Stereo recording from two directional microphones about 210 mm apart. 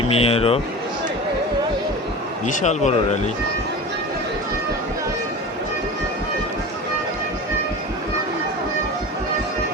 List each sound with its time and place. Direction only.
0.0 s a man's voice: 30° left (ahead or behind)
2.5 s speech: 35° left (ahead or behind)